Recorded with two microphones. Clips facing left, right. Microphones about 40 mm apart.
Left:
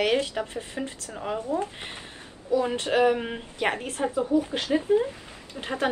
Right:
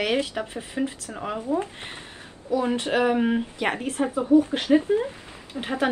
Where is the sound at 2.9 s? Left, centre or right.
Centre.